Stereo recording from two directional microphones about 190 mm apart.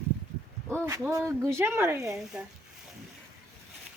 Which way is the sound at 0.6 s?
15° right (ahead or behind).